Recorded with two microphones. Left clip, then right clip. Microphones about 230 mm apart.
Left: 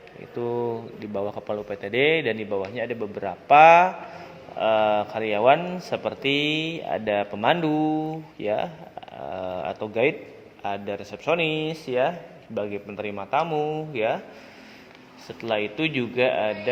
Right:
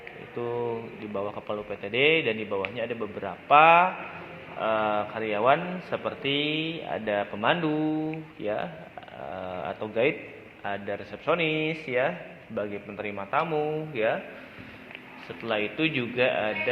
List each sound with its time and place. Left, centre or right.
0.3 s speech: left
9.3 s a sound: left
10.6 s speech: left
15.4 s speech: left